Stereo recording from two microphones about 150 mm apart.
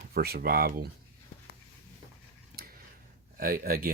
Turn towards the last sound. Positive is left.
turn(degrees=-75)  # may be behind; listen again after turning